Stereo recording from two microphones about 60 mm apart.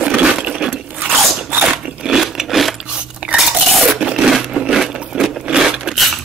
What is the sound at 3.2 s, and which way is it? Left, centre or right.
Biting, centre.